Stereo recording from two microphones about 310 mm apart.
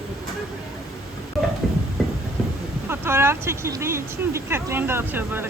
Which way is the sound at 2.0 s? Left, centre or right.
Centre.